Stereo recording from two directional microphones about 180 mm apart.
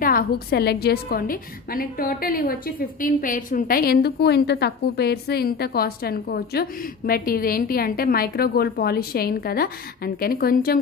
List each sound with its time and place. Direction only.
0.0 s a woman's voice: 60° left (ahead or behind)